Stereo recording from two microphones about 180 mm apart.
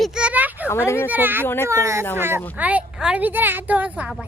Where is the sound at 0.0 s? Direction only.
5° right (ahead or behind).